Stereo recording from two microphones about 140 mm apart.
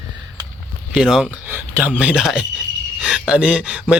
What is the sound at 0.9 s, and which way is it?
A man's voice, 5° right (ahead or behind).